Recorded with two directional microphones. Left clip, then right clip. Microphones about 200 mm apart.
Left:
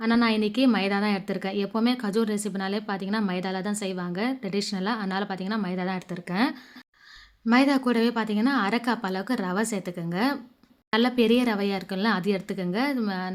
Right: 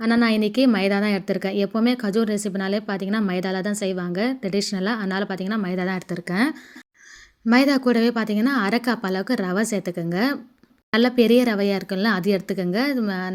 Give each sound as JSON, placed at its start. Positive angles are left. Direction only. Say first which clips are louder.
{"t": 0.0, "sound": "speech", "louder": "right 3 dB", "side_deg": -15}